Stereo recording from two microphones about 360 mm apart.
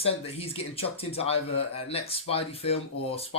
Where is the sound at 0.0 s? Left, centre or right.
Centre.